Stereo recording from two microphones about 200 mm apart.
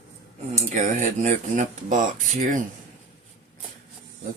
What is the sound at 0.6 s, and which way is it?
Speech, 35° right (ahead or behind).